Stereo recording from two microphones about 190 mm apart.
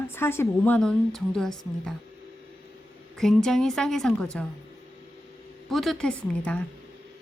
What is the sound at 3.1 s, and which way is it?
A woman's voice, centre (ahead or behind).